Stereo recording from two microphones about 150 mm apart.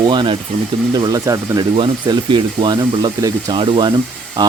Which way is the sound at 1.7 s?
35° right (ahead or behind).